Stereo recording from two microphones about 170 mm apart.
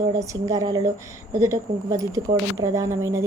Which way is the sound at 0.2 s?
20° right (ahead or behind).